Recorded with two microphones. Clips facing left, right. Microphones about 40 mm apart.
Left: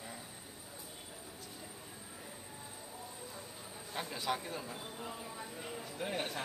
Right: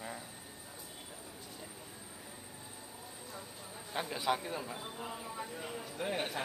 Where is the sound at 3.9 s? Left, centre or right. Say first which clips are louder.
Right 3 dB; centre.